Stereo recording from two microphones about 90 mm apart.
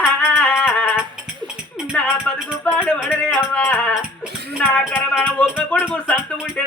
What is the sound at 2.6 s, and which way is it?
Rattle, 15° left (ahead or behind).